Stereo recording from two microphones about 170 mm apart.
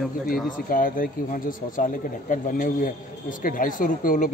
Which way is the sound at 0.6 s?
55° left (ahead or behind).